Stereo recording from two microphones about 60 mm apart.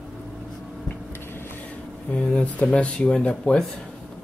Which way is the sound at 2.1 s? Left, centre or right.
Left.